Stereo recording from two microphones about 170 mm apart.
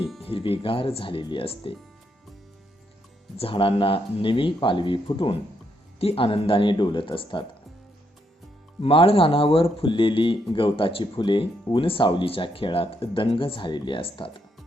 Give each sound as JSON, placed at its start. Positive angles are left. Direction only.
{"t": 0.2, "sound": "speech", "side_deg": 35}
{"t": 3.3, "sound": "speech", "side_deg": 30}
{"t": 8.8, "sound": "speech", "side_deg": 35}